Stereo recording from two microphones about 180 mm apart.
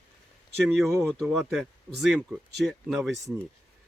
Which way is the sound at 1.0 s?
Centre (ahead or behind).